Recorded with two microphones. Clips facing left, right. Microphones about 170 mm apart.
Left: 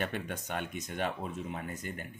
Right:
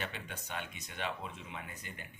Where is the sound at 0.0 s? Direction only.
50° left (ahead or behind).